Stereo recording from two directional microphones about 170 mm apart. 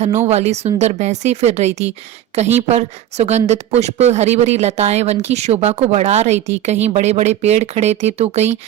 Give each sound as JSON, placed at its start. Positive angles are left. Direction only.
{"t": 0.3, "sound": "speech", "side_deg": -40}